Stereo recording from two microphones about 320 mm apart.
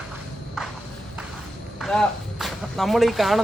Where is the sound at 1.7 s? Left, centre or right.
Centre.